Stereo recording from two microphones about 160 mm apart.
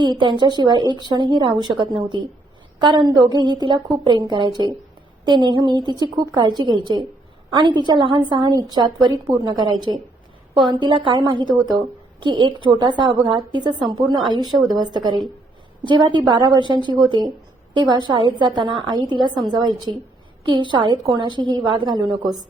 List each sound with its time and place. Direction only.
0.0 s a woman's voice: 30° right (ahead or behind)